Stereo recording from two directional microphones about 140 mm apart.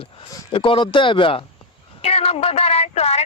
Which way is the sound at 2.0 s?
45° left (ahead or behind).